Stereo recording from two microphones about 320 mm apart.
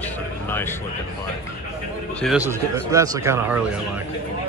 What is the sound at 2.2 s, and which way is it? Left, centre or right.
A man's voice, centre.